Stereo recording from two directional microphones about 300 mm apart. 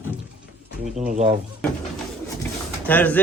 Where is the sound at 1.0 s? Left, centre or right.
Right.